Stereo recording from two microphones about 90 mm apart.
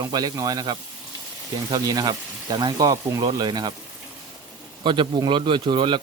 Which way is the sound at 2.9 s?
35° right (ahead or behind).